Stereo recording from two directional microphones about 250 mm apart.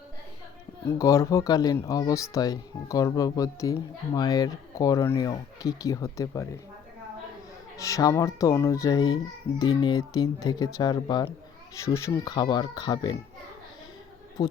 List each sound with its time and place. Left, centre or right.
0.9 s speech: centre
7.8 s speech: centre